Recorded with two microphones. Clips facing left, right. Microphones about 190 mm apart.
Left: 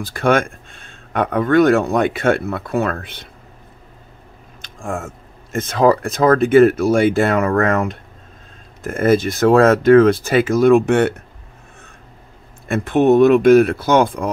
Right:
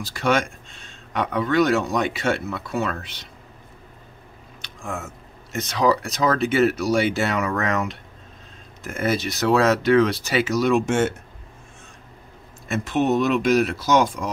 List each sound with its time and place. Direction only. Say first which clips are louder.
0.0 s speech: left 5 dB; 55° left (ahead or behind)
4.6 s speech: left 6 dB; 50° left (ahead or behind)
12.6 s speech: left 7 dB; 55° left (ahead or behind)